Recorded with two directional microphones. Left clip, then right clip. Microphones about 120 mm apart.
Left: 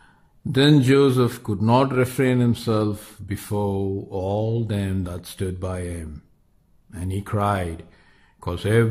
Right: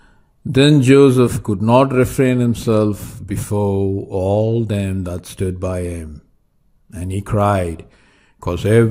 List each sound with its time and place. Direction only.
0.0 s a man's voice: 35° right (ahead or behind)